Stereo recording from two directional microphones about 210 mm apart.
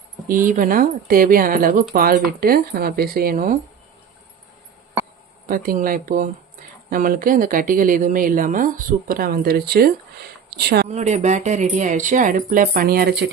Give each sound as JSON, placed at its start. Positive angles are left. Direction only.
{"t": 0.3, "sound": "speech", "side_deg": -40}
{"t": 5.5, "sound": "speech", "side_deg": -40}
{"t": 10.8, "sound": "speech", "side_deg": -35}